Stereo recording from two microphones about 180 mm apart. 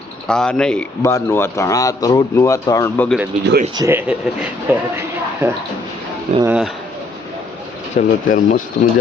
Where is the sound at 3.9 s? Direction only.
10° right (ahead or behind).